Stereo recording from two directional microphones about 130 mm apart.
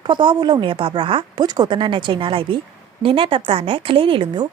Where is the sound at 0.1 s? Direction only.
40° right (ahead or behind).